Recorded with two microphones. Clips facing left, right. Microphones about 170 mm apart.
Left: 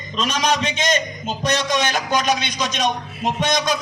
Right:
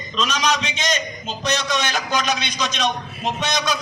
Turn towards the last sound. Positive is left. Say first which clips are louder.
# left 3 dB
turn(degrees=50)  # may be behind; listen again after turning